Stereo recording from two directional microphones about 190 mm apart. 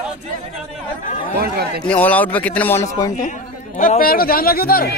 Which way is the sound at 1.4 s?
55° right (ahead or behind).